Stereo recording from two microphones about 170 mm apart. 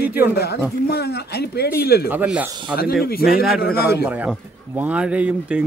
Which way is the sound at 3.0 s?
60° left (ahead or behind).